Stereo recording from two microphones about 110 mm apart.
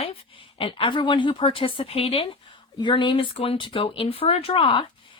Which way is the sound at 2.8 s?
45° left (ahead or behind).